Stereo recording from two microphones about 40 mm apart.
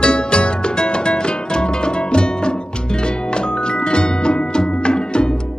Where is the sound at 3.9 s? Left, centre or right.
Left.